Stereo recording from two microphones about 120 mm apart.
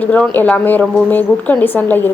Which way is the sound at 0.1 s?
10° left (ahead or behind).